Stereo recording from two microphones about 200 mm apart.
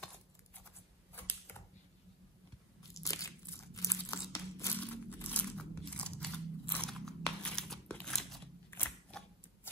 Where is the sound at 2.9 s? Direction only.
15° left (ahead or behind).